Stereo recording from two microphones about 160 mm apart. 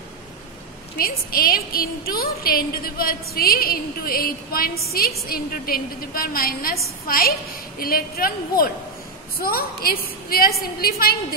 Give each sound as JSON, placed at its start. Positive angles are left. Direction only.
{"t": 0.9, "sound": "a woman's voice", "side_deg": 65}